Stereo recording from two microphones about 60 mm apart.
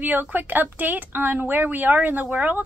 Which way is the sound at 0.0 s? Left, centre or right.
Right.